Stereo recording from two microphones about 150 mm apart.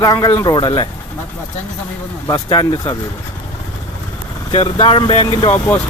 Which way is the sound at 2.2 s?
25° left (ahead or behind).